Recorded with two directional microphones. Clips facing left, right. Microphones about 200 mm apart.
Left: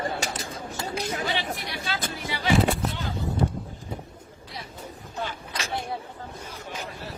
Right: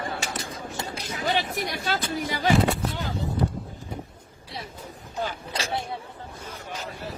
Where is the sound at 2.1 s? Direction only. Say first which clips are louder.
Right 4 dB; 45° right (ahead or behind).